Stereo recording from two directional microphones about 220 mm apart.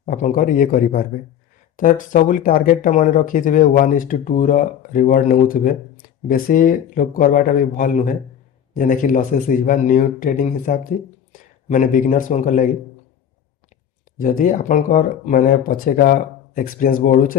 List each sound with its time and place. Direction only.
0.0 s speech: 35° left (ahead or behind)
14.2 s speech: 40° left (ahead or behind)